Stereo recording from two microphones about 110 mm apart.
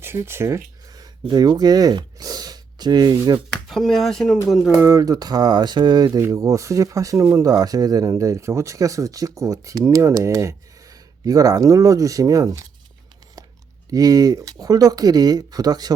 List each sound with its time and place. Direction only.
0.0 s a sound: 20° right (ahead or behind)
1.3 s speech: 40° right (ahead or behind)
3.7 s speech: centre (ahead or behind)
4.8 s speech: 30° right (ahead or behind)
13.9 s speech: 35° right (ahead or behind)